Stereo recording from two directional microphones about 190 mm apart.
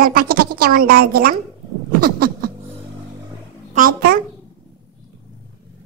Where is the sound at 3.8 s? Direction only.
50° right (ahead or behind).